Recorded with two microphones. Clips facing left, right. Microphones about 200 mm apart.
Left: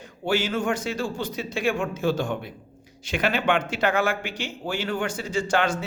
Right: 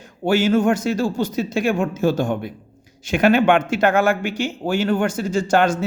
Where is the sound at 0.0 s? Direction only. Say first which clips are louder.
Right 7 dB; 45° right (ahead or behind).